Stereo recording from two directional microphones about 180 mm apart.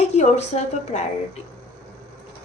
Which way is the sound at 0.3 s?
40° left (ahead or behind).